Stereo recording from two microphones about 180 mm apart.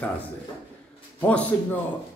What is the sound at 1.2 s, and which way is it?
Speech, 10° left (ahead or behind).